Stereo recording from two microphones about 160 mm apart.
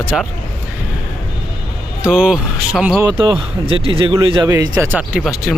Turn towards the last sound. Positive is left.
turn(degrees=5)  # may be behind; listen again after turning